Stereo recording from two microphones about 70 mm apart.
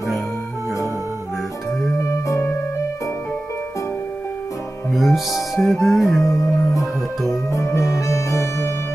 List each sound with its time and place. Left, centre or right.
4.9 s music: centre
6.2 s music: left